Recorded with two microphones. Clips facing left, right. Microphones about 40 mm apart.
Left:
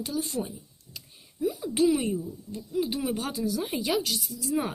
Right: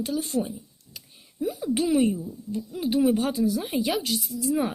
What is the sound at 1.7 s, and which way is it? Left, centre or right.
Speech, right.